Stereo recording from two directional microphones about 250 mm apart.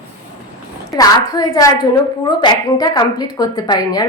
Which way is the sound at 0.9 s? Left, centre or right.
Centre.